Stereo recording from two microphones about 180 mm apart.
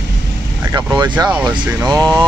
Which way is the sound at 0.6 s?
20° right (ahead or behind).